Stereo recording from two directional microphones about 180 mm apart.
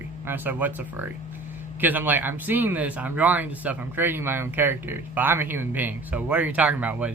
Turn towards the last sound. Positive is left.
turn(degrees=-10)  # may be behind; listen again after turning